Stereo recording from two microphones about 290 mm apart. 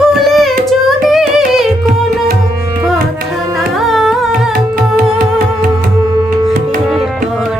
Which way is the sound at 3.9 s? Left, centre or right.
Centre.